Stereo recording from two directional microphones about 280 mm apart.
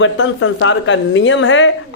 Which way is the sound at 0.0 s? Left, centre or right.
Left.